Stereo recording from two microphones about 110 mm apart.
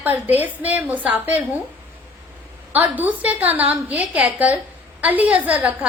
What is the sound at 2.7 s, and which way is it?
A woman's voice, 15° right (ahead or behind).